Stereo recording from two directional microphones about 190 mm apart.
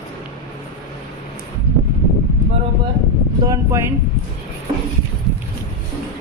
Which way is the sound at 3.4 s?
15° right (ahead or behind).